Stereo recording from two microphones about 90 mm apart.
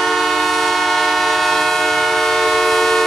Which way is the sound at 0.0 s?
Centre (ahead or behind).